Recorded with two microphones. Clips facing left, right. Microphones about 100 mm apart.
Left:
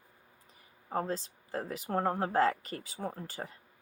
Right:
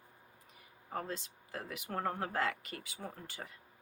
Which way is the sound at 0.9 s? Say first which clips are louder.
Left 7 dB; 35° left (ahead or behind).